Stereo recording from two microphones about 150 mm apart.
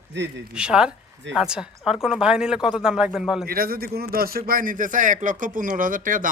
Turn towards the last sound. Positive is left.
turn(degrees=-65)  # may be behind; listen again after turning